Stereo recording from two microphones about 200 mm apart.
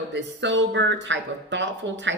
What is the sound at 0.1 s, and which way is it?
Speech, 60° right (ahead or behind).